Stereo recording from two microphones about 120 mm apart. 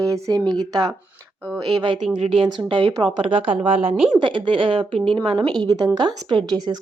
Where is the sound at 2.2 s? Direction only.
50° right (ahead or behind).